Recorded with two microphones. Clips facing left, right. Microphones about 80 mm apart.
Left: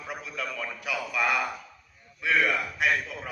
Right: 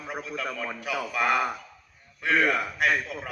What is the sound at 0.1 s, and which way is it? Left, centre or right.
A man's voice, right.